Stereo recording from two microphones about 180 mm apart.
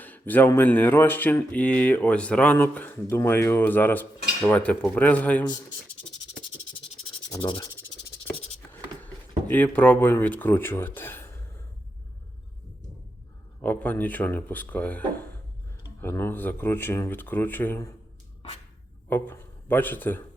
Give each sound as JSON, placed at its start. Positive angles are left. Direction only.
{"t": 0.0, "sound": "speech", "side_deg": 10}
{"t": 7.3, "sound": "sanding", "side_deg": 25}
{"t": 9.5, "sound": "speech", "side_deg": 10}
{"t": 13.6, "sound": "speech", "side_deg": 10}
{"t": 19.0, "sound": "speech", "side_deg": 10}